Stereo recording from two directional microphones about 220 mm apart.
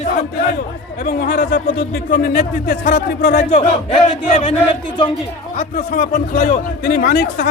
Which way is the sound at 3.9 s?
25° left (ahead or behind).